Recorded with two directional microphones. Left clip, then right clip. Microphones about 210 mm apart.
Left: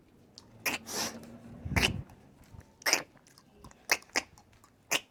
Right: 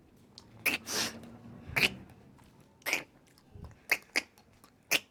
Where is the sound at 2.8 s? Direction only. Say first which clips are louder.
Left 4 dB; 25° left (ahead or behind).